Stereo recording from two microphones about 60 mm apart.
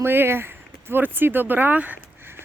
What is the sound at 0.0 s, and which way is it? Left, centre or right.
Speech, right.